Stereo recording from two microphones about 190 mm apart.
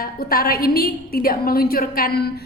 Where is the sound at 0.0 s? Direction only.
50° left (ahead or behind).